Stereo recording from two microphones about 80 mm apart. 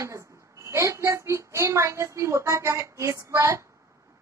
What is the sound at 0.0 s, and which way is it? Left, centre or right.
A woman's voice, right.